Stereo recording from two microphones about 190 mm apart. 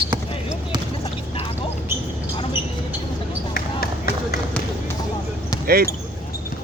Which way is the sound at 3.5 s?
55° left (ahead or behind).